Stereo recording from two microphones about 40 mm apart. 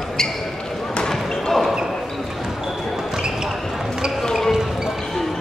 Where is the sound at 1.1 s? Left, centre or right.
Centre.